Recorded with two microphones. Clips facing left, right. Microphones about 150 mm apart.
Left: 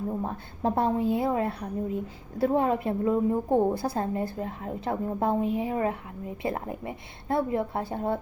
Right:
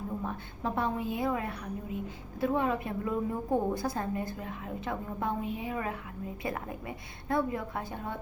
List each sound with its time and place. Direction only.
0.2 s a woman's voice: 35° left (ahead or behind)